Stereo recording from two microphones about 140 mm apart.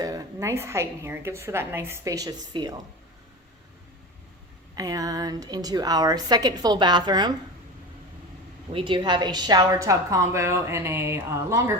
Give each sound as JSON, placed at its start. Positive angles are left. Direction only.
{"t": 0.0, "sound": "a woman's voice", "side_deg": -25}
{"t": 4.7, "sound": "a woman's voice", "side_deg": -25}
{"t": 8.7, "sound": "a woman's voice", "side_deg": -35}